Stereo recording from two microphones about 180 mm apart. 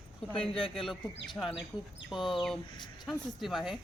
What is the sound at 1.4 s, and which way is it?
Speech, 10° left (ahead or behind).